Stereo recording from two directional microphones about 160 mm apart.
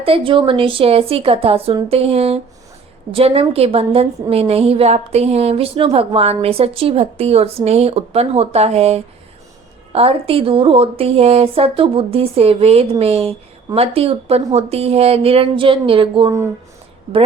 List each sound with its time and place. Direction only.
0.0 s a woman's voice: 35° right (ahead or behind)